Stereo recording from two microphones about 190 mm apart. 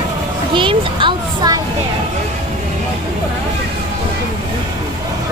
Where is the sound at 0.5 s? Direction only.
25° right (ahead or behind).